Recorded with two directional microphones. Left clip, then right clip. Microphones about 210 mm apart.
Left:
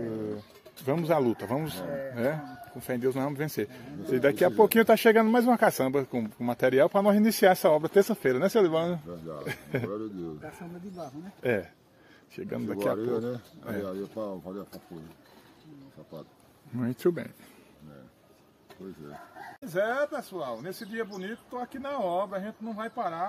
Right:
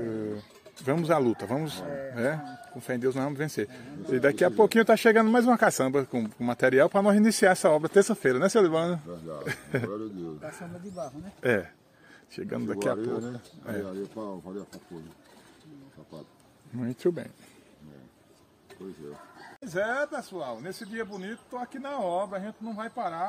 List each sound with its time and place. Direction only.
0.8 s speech: 15° right (ahead or behind)
10.4 s a man's voice: 20° right (ahead or behind)
13.0 s speech: 30° left (ahead or behind)
16.7 s speech: 10° left (ahead or behind)
19.6 s speech: 5° left (ahead or behind)